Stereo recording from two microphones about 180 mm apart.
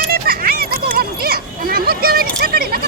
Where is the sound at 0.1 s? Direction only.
55° right (ahead or behind).